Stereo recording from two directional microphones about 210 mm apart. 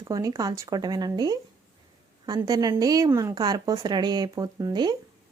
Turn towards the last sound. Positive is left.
turn(degrees=-20)  # may be behind; listen again after turning